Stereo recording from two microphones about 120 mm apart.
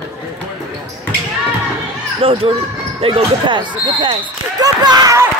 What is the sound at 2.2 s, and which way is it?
Speech, 50° right (ahead or behind).